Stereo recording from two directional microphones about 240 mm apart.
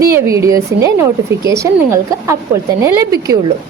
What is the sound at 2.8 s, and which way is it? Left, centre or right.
Speech, centre.